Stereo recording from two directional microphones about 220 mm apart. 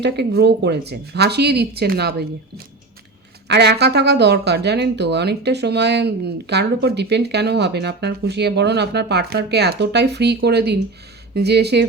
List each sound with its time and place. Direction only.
0.0 s speech: 50° right (ahead or behind)
3.4 s speech: 50° right (ahead or behind)